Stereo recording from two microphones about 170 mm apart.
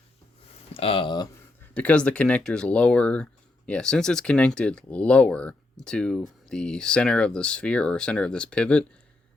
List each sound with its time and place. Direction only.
0.7 s speech: 35° left (ahead or behind)
1.7 s speech: 10° left (ahead or behind)